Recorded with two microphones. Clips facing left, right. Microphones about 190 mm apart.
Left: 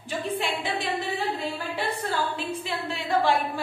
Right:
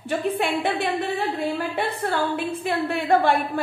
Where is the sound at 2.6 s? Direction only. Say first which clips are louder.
Right 7 dB; 55° right (ahead or behind).